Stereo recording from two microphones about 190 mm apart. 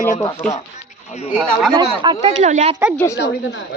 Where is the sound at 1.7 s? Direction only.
25° right (ahead or behind).